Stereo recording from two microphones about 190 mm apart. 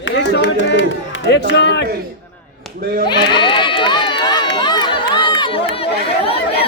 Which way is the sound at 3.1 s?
25° left (ahead or behind).